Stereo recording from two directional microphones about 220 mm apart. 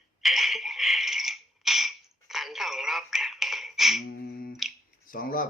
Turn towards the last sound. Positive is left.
turn(degrees=40)  # may be behind; listen again after turning